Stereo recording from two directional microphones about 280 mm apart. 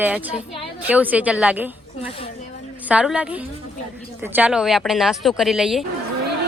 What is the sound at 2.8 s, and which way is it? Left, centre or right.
A woman's voice, centre.